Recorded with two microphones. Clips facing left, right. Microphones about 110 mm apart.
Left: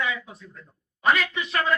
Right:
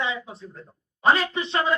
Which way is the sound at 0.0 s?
25° right (ahead or behind).